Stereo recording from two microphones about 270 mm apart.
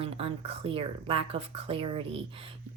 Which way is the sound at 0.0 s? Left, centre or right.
Right.